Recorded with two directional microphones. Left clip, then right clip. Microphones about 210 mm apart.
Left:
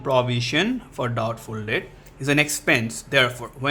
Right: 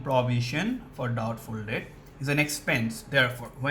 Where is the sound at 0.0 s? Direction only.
35° left (ahead or behind).